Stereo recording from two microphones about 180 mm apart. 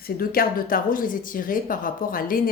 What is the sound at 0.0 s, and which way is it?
A woman's voice, 55° left (ahead or behind).